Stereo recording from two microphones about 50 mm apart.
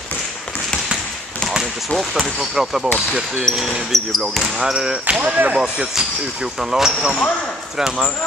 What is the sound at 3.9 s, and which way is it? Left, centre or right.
Speech, centre.